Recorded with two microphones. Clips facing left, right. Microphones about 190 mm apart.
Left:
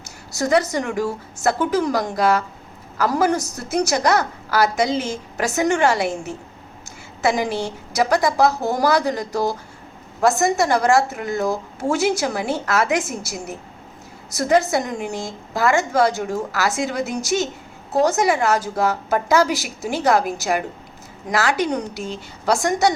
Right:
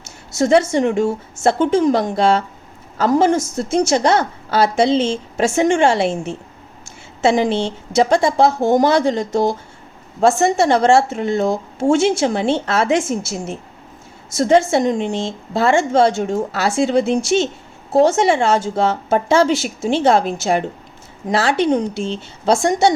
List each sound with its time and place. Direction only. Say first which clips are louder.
0.0 s a woman's voice: right 6 dB; 25° right (ahead or behind)